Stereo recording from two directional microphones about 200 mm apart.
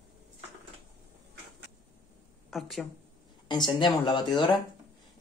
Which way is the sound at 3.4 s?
20° left (ahead or behind).